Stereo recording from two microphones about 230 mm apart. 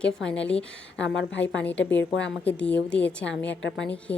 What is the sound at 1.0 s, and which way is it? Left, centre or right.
Speech, left.